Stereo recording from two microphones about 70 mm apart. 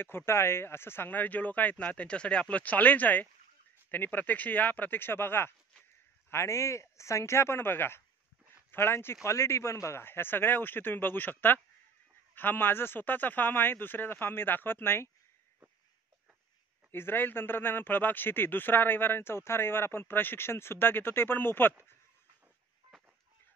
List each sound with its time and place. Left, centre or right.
0.0 s speech: left
6.3 s speech: left
16.9 s speech: left